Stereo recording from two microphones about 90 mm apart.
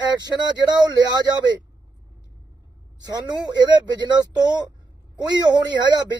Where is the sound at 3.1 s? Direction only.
50° right (ahead or behind).